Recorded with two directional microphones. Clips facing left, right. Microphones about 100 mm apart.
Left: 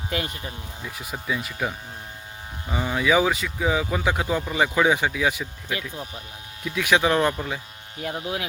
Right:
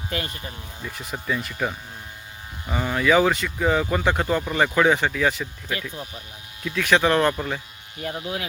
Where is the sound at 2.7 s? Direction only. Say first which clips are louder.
Right 2 dB; 10° left (ahead or behind).